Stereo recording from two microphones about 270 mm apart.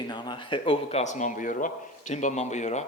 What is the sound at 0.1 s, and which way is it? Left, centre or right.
Speech, centre.